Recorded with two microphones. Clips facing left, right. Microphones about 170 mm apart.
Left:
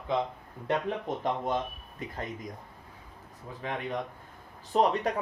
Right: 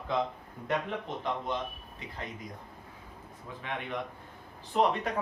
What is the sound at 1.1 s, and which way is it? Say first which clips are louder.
Speech: left 4 dB; 40° left (ahead or behind).